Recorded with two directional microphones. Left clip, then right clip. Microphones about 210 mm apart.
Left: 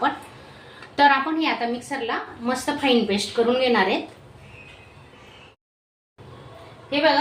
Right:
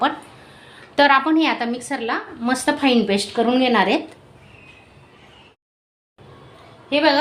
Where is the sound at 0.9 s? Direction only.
35° right (ahead or behind); by 3.9 s 55° right (ahead or behind).